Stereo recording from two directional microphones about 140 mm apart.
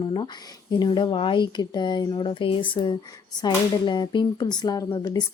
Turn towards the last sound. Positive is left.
turn(degrees=30)  # may be behind; listen again after turning